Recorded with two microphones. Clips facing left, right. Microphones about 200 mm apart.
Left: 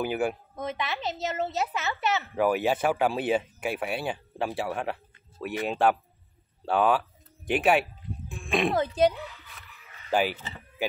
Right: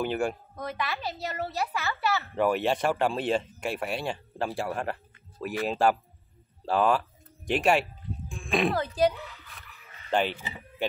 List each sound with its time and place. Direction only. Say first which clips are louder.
0.0 s speech: left 1 dB; 5° left (ahead or behind)
0.6 s a woman's voice: left 1 dB; 20° left (ahead or behind)
2.3 s a child's voice: left 1 dB; 5° left (ahead or behind)
8.7 s a woman's voice: left 2 dB; 20° left (ahead or behind)
10.1 s speech: left 1 dB; 5° left (ahead or behind)